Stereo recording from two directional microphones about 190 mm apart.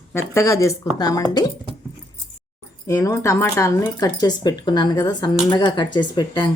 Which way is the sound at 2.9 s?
15° left (ahead or behind).